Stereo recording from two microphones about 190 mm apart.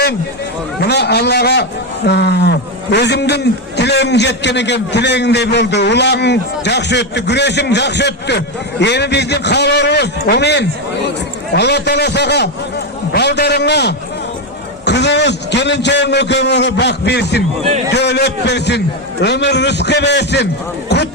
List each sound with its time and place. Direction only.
0.9 s a man's voice: 60° left (ahead or behind)